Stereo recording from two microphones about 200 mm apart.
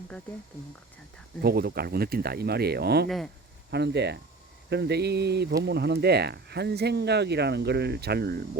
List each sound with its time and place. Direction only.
1.4 s speech: 50° right (ahead or behind)